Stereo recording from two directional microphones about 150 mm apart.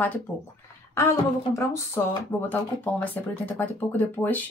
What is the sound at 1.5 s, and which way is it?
Speech, 20° left (ahead or behind).